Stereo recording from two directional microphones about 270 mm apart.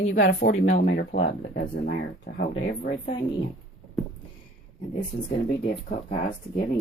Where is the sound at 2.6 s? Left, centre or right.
Left.